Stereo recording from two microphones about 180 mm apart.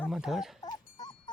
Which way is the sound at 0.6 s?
20° left (ahead or behind).